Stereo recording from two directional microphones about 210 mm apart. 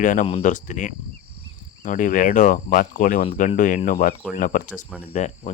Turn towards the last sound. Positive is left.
turn(degrees=35)  # may be behind; listen again after turning